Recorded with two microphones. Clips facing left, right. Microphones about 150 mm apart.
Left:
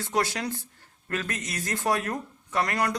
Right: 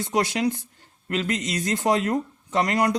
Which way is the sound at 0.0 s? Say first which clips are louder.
Right 5 dB; 20° right (ahead or behind).